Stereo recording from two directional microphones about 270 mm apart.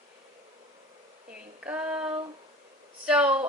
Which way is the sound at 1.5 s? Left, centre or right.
Centre.